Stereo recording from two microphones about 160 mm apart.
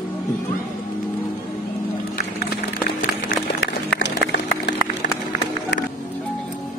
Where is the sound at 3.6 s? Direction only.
90° left.